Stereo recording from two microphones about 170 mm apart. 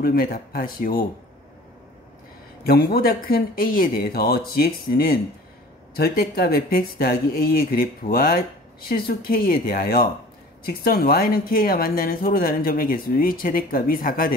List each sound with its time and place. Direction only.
0.0 s speech: 60° left (ahead or behind)
2.6 s speech: 65° left (ahead or behind)